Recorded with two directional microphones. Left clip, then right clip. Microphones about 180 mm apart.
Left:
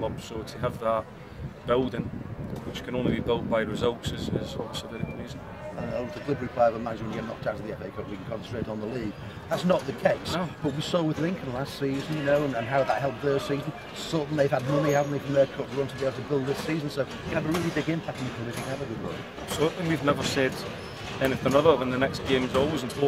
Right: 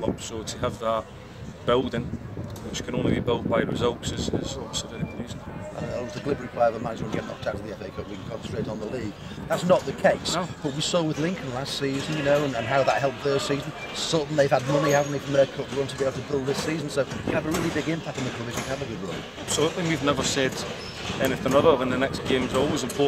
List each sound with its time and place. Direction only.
0.6 s speech: centre (ahead or behind)
5.9 s speech: 25° right (ahead or behind)
9.5 s speech: 25° right (ahead or behind)
19.6 s speech: centre (ahead or behind)